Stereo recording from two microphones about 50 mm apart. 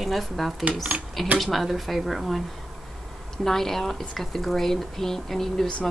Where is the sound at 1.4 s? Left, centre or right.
Centre.